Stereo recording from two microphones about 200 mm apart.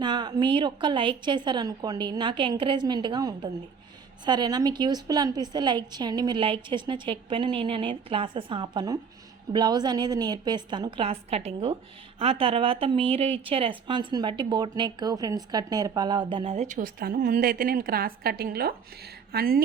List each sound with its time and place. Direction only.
0.0 s a woman's voice: 20° right (ahead or behind); by 19.6 s 50° right (ahead or behind)